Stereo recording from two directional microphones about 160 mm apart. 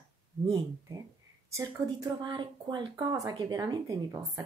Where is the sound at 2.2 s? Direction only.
25° right (ahead or behind).